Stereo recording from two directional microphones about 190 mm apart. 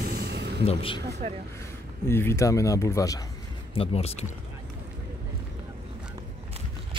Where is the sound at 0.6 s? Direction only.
30° left (ahead or behind).